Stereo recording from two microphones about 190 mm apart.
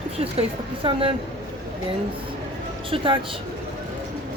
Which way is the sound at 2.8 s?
25° right (ahead or behind).